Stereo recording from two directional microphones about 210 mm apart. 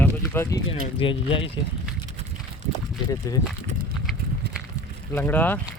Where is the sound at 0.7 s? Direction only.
25° left (ahead or behind).